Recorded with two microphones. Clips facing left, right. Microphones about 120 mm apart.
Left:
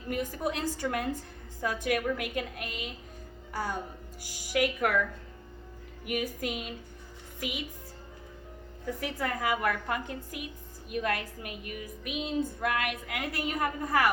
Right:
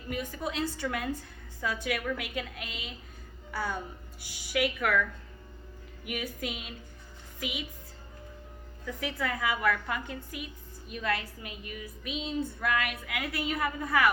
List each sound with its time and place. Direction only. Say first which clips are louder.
0.1 s a woman's voice: left 3 dB; 45° left (ahead or behind)
6.4 s a woman's voice: left 3 dB; 50° left (ahead or behind)
8.9 s a woman's voice: left 1 dB; 45° left (ahead or behind)